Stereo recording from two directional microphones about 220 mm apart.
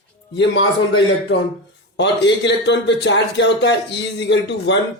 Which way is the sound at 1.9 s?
50° left (ahead or behind).